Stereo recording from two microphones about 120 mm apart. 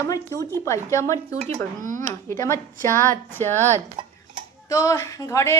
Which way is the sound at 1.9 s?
25° left (ahead or behind).